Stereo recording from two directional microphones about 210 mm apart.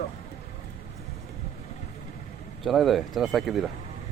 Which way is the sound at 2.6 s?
Centre (ahead or behind).